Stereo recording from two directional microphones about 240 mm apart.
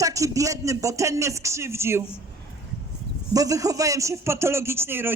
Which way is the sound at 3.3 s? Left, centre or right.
Centre.